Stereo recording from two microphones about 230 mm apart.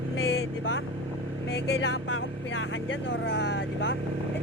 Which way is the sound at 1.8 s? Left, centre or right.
Left.